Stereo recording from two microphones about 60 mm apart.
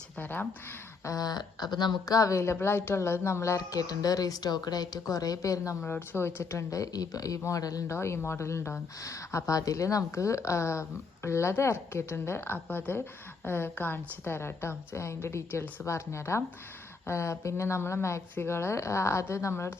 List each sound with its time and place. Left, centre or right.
0.2 s speech: left
1.0 s a sound: left
1.8 s a woman's voice: left
5.8 s speech: left
7.9 s speech: left
12.5 s speech: left
13.4 s speech: left